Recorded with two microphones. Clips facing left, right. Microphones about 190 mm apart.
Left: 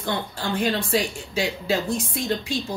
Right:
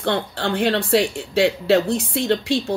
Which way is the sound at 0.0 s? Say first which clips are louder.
Right 5 dB; 70° right (ahead or behind).